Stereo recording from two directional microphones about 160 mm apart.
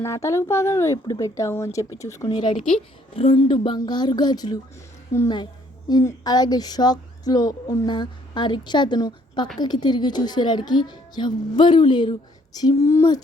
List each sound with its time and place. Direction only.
0.0 s speech: 15° left (ahead or behind)